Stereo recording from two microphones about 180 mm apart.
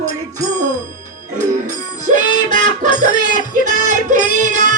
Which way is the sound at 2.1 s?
45° right (ahead or behind).